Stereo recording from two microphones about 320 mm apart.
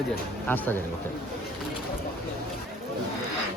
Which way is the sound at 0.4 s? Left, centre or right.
Centre.